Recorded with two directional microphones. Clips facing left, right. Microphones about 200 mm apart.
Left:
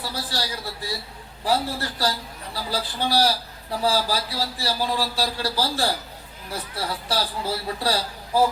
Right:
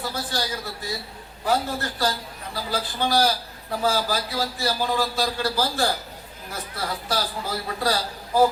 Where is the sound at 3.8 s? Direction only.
35° left (ahead or behind).